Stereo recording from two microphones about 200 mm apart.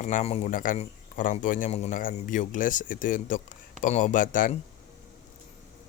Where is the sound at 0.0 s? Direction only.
35° left (ahead or behind).